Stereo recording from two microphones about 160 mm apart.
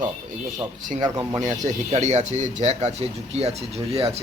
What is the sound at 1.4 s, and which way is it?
Speech, 50° right (ahead or behind).